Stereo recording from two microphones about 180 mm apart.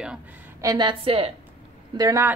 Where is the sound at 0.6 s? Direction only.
25° right (ahead or behind).